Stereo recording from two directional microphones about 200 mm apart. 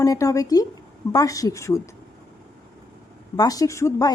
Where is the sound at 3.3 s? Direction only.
20° left (ahead or behind).